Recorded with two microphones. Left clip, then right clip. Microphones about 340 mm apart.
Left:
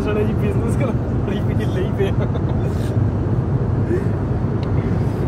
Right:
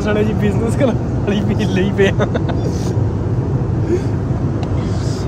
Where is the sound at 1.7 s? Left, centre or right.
Right.